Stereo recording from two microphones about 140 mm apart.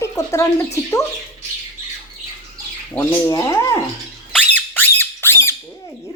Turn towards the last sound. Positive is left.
turn(degrees=15)  # may be behind; listen again after turning